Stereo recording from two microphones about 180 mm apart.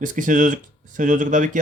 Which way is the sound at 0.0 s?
45° right (ahead or behind).